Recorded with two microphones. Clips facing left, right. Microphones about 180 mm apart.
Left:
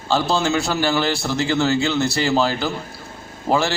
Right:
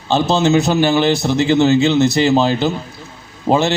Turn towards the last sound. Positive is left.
turn(degrees=-20)  # may be behind; listen again after turning